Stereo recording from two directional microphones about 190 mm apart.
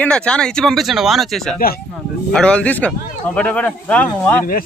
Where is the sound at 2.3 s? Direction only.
5° left (ahead or behind).